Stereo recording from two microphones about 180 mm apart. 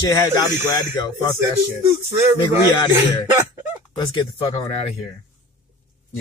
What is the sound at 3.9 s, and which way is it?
Speech, 25° left (ahead or behind).